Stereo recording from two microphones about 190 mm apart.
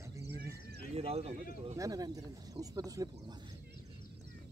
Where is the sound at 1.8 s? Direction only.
20° right (ahead or behind).